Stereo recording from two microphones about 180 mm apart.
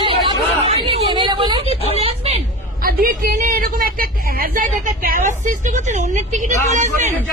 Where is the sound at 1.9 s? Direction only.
35° right (ahead or behind).